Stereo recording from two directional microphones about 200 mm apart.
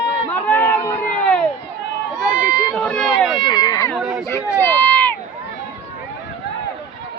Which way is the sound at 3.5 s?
20° left (ahead or behind).